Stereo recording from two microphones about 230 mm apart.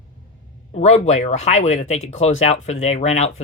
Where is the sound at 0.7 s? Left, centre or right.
Left.